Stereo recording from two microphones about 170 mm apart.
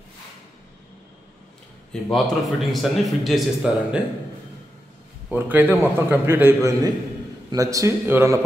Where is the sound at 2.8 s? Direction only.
Centre (ahead or behind).